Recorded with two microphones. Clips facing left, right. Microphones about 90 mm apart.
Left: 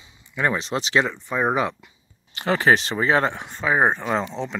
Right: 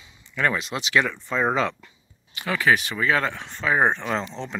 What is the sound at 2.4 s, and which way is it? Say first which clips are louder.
Speech: left 3 dB; 35° left (ahead or behind).